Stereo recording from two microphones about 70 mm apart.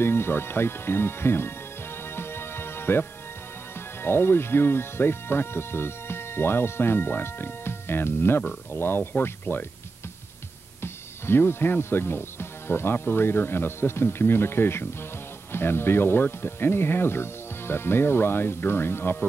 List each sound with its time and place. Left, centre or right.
0.0 s speech: left
2.1 s music: left
4.0 s speech: left
10.8 s speech: left